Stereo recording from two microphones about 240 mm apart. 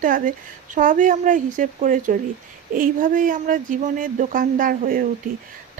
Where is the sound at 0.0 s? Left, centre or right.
Right.